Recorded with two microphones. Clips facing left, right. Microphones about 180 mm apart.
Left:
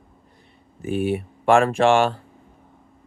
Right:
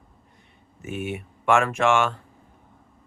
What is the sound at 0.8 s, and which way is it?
Speech, 35° left (ahead or behind).